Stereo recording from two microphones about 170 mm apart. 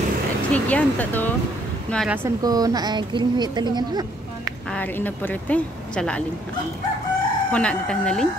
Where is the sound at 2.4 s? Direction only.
20° right (ahead or behind).